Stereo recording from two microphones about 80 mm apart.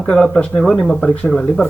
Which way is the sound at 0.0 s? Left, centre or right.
Centre.